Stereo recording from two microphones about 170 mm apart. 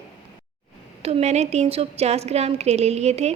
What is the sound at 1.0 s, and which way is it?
A woman's voice, 35° right (ahead or behind).